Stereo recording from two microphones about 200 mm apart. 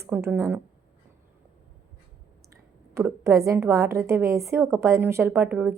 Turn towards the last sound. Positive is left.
turn(degrees=-5)  # may be behind; listen again after turning